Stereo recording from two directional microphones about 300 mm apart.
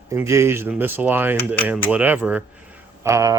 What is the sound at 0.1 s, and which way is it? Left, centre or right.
Speech, centre.